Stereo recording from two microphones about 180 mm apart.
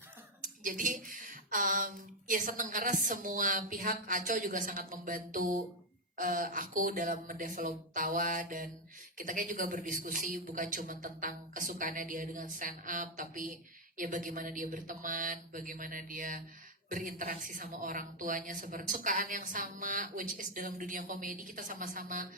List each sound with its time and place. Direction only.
0.4 s a man's voice: 50° right (ahead or behind)